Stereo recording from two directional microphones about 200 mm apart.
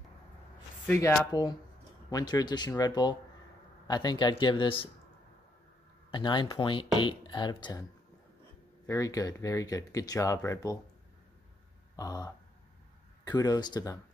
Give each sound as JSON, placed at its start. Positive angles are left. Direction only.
{"t": 0.8, "sound": "speech", "side_deg": 10}
{"t": 6.1, "sound": "speech", "side_deg": 25}
{"t": 8.8, "sound": "speech", "side_deg": 15}
{"t": 12.0, "sound": "speech", "side_deg": 15}